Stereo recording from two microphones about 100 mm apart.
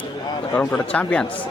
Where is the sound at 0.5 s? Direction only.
15° left (ahead or behind).